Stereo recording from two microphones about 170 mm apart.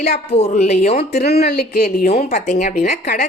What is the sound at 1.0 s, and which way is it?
Speech, 70° left (ahead or behind).